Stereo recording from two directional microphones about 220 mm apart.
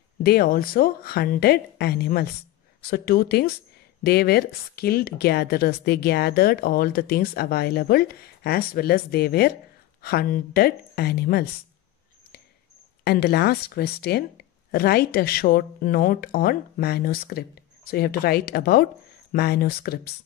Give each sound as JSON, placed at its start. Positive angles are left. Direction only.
{"t": 0.2, "sound": "a woman's voice", "side_deg": 45}
{"t": 13.0, "sound": "a woman's voice", "side_deg": 45}